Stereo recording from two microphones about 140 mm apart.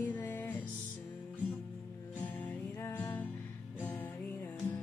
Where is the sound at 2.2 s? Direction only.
15° left (ahead or behind).